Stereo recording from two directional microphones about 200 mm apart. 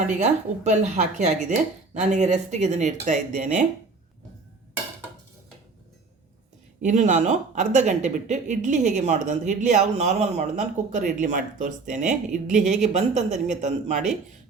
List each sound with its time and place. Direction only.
0.1 s speech: 35° right (ahead or behind)
6.8 s speech: 35° right (ahead or behind)